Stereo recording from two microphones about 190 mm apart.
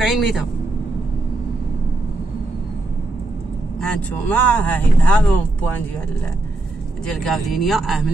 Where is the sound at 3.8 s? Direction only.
10° left (ahead or behind).